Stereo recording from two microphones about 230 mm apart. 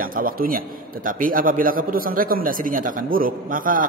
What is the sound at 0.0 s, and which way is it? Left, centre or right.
A man's voice, right.